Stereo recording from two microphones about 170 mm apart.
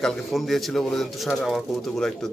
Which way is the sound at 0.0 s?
Centre (ahead or behind).